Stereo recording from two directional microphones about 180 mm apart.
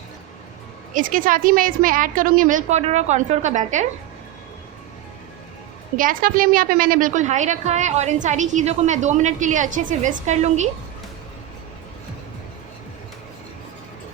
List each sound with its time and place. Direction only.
0.9 s a woman's voice: 50° right (ahead or behind)
6.0 s a woman's voice: 50° right (ahead or behind)